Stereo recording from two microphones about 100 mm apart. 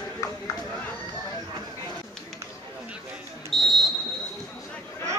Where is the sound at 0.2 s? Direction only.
30° left (ahead or behind).